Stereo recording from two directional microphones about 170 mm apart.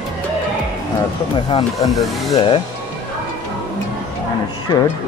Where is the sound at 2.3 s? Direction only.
30° left (ahead or behind).